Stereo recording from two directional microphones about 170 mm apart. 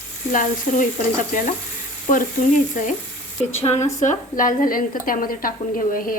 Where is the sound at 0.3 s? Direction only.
50° left (ahead or behind).